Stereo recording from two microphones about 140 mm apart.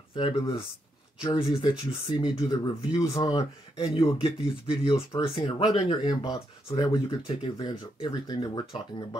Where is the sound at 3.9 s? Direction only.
40° left (ahead or behind).